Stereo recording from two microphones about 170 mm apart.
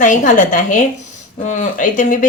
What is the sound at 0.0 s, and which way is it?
A woman's voice, 50° left (ahead or behind).